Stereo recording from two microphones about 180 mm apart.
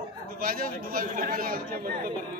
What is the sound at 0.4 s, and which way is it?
A man's voice, 50° right (ahead or behind).